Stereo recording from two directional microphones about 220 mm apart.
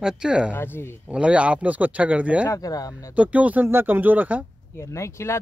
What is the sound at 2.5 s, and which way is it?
Speech, 15° left (ahead or behind).